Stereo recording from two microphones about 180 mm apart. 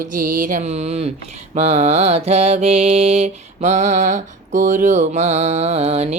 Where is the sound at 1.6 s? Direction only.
40° right (ahead or behind).